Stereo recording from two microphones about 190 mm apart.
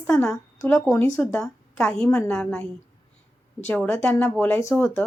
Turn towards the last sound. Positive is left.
turn(degrees=10)  # may be behind; listen again after turning